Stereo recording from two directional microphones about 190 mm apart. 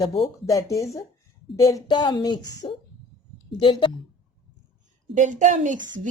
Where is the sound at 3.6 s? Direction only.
25° left (ahead or behind).